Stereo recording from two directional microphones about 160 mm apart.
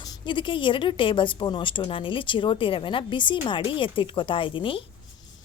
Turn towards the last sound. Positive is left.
turn(degrees=30)  # may be behind; listen again after turning